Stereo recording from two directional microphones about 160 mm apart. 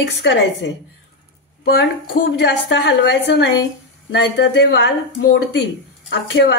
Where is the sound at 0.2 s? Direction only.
90° left.